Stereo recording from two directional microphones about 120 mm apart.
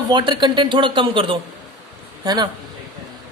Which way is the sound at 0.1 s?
40° right (ahead or behind).